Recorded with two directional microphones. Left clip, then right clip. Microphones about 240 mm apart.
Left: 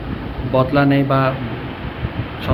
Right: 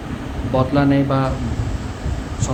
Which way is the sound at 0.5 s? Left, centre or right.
Centre.